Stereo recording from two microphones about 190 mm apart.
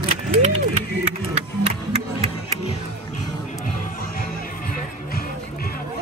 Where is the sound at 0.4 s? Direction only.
35° right (ahead or behind).